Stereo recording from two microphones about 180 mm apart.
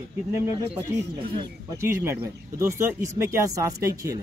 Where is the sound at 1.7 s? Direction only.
15° right (ahead or behind).